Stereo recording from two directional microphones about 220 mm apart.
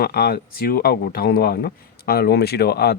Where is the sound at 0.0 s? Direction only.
45° left (ahead or behind).